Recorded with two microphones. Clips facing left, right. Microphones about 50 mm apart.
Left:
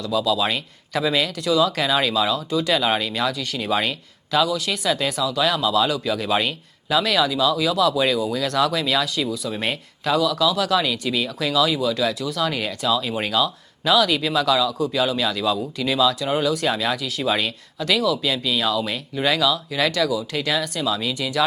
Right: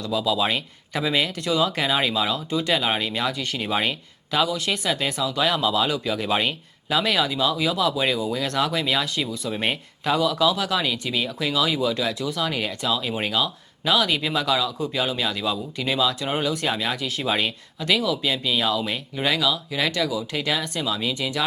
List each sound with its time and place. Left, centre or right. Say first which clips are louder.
0.0 s speech: left 2 dB; centre
4.9 s speech: left 5 dB; centre